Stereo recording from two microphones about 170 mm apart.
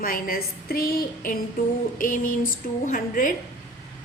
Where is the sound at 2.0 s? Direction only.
55° left (ahead or behind).